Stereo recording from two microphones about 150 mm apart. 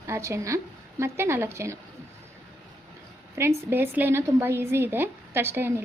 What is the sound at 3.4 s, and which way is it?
A woman's voice, 20° right (ahead or behind).